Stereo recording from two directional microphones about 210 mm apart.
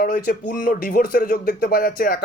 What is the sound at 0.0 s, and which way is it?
A man's voice, 45° left (ahead or behind).